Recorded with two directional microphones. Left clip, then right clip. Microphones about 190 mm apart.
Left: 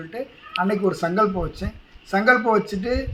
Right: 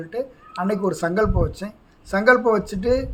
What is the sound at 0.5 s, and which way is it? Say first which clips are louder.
Speech: left 3 dB; 15° right (ahead or behind).